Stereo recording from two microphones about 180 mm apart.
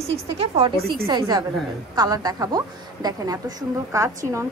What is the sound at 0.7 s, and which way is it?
Speech, 60° right (ahead or behind).